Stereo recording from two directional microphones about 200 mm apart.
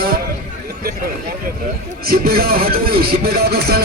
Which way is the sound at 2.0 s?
50° right (ahead or behind).